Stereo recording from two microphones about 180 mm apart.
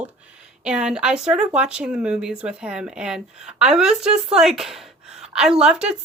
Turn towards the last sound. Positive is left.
turn(degrees=-5)  # may be behind; listen again after turning